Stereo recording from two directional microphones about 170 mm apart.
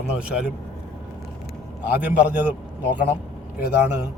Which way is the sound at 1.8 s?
10° right (ahead or behind).